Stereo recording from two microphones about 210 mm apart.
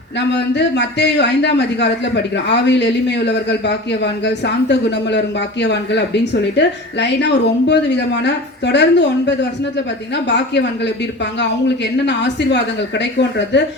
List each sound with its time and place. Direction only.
0.2 s a man's voice: 55° left (ahead or behind)